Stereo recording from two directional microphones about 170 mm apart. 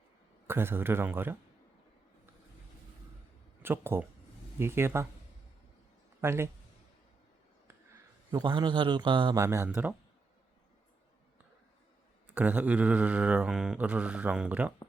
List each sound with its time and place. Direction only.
0.4 s mantra: 15° right (ahead or behind)
3.6 s speech: 15° right (ahead or behind)
4.5 s mantra: 15° right (ahead or behind)
6.2 s mantra: 15° right (ahead or behind)
8.3 s a man's voice: 25° right (ahead or behind)
9.4 s mantra: 15° right (ahead or behind)
12.3 s mantra: 10° right (ahead or behind)